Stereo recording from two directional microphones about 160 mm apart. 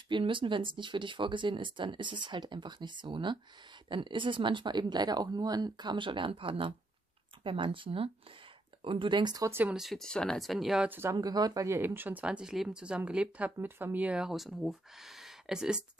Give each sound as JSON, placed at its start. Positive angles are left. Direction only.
{"t": 0.1, "sound": "speech", "side_deg": -30}